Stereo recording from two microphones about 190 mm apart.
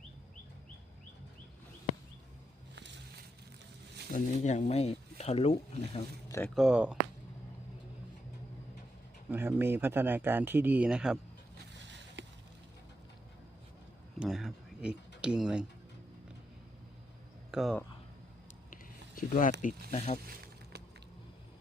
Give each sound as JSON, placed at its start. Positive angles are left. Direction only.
{"t": 4.1, "sound": "speech", "side_deg": 40}
{"t": 6.2, "sound": "speech", "side_deg": 15}
{"t": 6.5, "sound": "speech", "side_deg": 0}
{"t": 9.3, "sound": "speech", "side_deg": -10}
{"t": 14.2, "sound": "a sound", "side_deg": 0}
{"t": 17.5, "sound": "a sound", "side_deg": 0}
{"t": 18.7, "sound": "speech", "side_deg": 45}